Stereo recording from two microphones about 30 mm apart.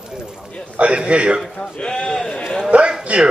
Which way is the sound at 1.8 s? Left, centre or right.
Left.